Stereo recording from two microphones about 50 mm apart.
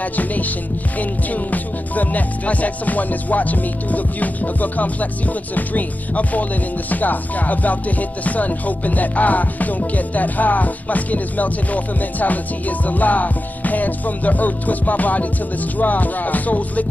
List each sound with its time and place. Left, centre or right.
0.0 s music: left